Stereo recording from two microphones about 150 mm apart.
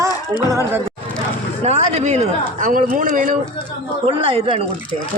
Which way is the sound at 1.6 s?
45° right (ahead or behind).